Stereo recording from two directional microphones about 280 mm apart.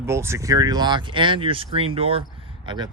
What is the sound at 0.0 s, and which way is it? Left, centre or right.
Speech, centre.